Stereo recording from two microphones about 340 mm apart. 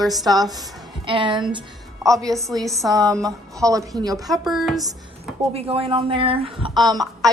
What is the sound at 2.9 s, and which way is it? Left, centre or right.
A woman's voice, centre.